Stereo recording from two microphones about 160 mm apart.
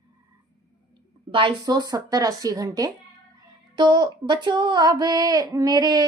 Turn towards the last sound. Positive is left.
turn(degrees=-25)  # may be behind; listen again after turning